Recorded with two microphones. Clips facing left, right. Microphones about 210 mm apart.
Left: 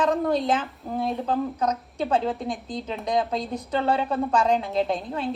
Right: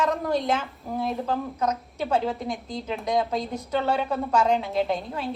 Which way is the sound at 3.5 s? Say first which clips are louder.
Left 2 dB; 30° left (ahead or behind).